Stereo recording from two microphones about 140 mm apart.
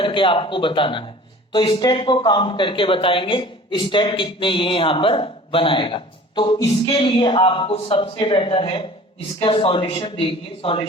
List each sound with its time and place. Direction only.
0.0 s speech: 35° left (ahead or behind)